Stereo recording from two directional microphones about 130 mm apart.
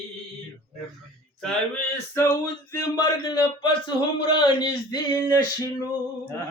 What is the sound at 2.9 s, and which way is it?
Speech, 35° left (ahead or behind).